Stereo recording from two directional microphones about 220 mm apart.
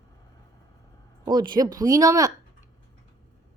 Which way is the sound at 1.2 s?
20° right (ahead or behind).